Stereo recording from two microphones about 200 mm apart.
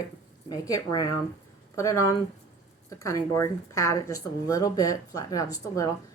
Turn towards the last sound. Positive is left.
turn(degrees=15)  # may be behind; listen again after turning